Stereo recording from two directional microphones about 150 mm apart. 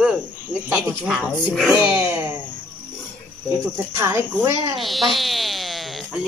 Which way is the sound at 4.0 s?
20° right (ahead or behind).